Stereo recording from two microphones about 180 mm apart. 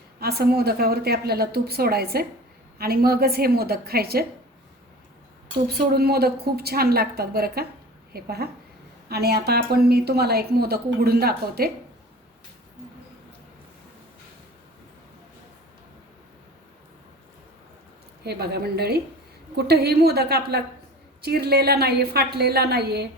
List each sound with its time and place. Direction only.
0.2 s a woman's voice: 60° right (ahead or behind)
5.6 s a woman's voice: 60° right (ahead or behind)
18.2 s a woman's voice: 65° right (ahead or behind)